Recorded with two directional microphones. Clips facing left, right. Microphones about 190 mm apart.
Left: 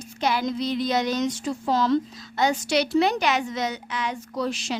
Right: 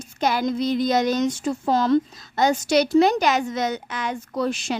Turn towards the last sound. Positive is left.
turn(degrees=-50)  # may be behind; listen again after turning